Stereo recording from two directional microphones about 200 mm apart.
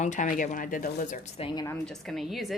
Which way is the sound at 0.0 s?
40° left (ahead or behind).